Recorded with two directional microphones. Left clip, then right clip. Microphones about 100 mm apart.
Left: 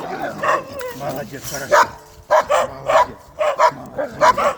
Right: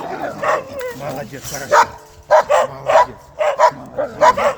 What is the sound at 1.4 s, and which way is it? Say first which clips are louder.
Speech: even; 30° right (ahead or behind).